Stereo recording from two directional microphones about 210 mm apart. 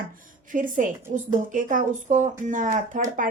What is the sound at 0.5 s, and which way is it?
A woman's voice, 40° right (ahead or behind).